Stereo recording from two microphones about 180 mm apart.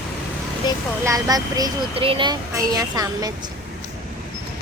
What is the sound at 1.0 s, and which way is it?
Speech, 20° right (ahead or behind).